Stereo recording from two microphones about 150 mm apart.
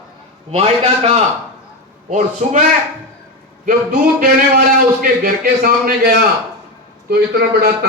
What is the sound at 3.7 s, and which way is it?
Speech, 75° right (ahead or behind).